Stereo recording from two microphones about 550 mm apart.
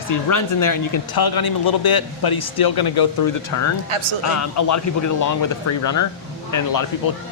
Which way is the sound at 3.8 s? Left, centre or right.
Right.